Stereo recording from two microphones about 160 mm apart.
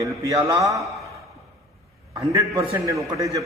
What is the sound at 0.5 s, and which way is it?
Speech, 20° right (ahead or behind).